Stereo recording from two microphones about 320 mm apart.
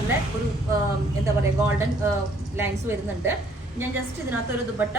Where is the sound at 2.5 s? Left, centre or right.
Centre.